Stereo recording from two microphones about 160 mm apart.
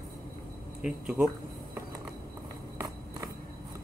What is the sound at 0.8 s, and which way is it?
Speech, 5° right (ahead or behind).